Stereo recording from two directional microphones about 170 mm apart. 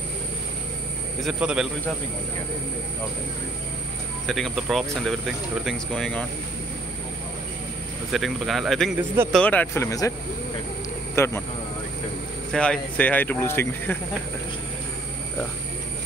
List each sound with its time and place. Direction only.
1.2 s speech: 5° right (ahead or behind)
4.3 s speech: centre (ahead or behind)
8.1 s speech: centre (ahead or behind); by 10.1 s 20° left (ahead or behind)
11.1 s speech: 15° left (ahead or behind)
12.5 s speech: 5° left (ahead or behind)